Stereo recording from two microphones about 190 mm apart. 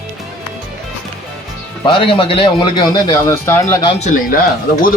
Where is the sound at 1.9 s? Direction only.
25° left (ahead or behind).